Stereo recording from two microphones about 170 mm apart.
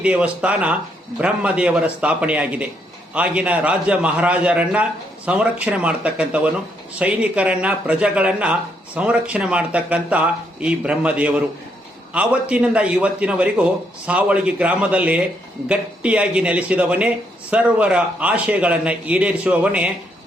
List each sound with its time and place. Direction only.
0.0 s a man's voice: 5° right (ahead or behind)